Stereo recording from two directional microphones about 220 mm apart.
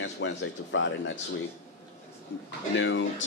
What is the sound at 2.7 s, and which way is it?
Speech, 60° left (ahead or behind).